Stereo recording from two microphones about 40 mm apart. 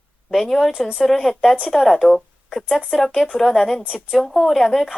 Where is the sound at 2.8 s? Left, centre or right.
Centre.